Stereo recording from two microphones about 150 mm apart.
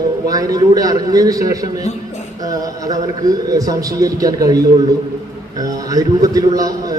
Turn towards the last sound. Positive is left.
turn(degrees=-25)  # may be behind; listen again after turning